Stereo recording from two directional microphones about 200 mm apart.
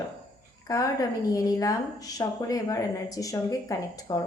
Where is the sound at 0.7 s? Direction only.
15° left (ahead or behind).